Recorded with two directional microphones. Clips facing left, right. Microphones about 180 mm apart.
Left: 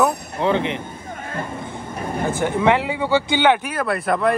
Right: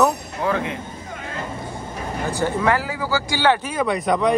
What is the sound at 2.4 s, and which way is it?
Speech, 15° left (ahead or behind).